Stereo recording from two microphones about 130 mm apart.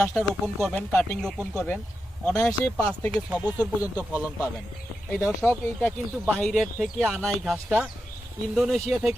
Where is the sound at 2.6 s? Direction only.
15° left (ahead or behind).